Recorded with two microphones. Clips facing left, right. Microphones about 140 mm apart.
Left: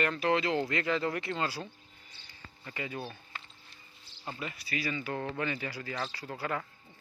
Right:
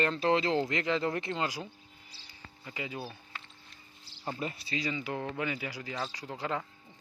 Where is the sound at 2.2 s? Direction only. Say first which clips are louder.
Even; 10° right (ahead or behind).